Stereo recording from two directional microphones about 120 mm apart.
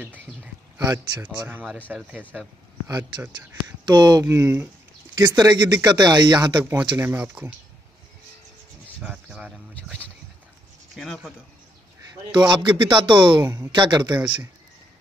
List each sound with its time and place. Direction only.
0.0 s a sound: 15° right (ahead or behind)
1.5 s speech: 15° right (ahead or behind)
2.9 s speech: 25° right (ahead or behind)
3.8 s speech: 35° right (ahead or behind)
4.3 s speech: 20° right (ahead or behind)
5.3 s speech: 35° right (ahead or behind)
6.6 s speech: 15° right (ahead or behind)
9.0 s a sound: 5° right (ahead or behind)
11.0 s speech: centre (ahead or behind)
12.4 s speech: 40° right (ahead or behind)
13.4 s speech: 25° right (ahead or behind)
13.7 s speech: 40° right (ahead or behind)